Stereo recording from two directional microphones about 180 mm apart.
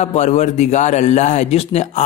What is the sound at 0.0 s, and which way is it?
A man's voice, 40° left (ahead or behind).